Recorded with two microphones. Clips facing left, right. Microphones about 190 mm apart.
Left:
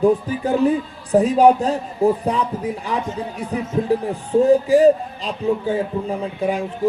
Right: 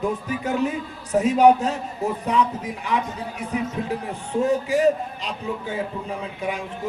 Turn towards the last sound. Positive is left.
turn(degrees=35)  # may be behind; listen again after turning